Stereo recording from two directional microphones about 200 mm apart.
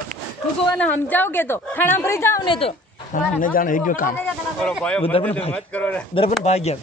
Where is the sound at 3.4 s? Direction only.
40° left (ahead or behind).